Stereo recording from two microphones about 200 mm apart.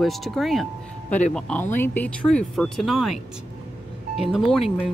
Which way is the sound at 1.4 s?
5° left (ahead or behind).